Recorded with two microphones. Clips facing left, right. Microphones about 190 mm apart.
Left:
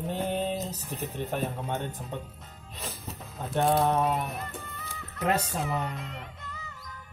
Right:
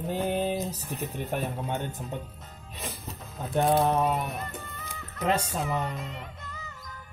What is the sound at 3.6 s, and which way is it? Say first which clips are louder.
Speech: right 1 dB; 5° right (ahead or behind).